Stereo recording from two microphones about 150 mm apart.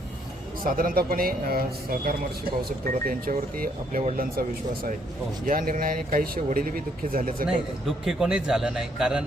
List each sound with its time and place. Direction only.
0.6 s speech: 70° right (ahead or behind)
2.6 s speech: 70° right (ahead or behind)
7.4 s a man's voice: 5° right (ahead or behind)